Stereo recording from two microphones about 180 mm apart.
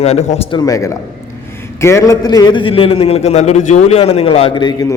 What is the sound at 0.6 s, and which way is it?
A man's voice, 20° left (ahead or behind).